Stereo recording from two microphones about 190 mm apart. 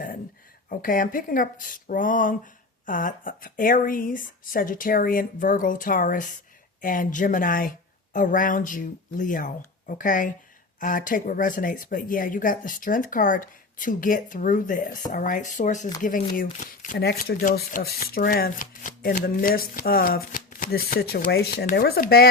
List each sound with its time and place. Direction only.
0.7 s speech: 45° left (ahead or behind)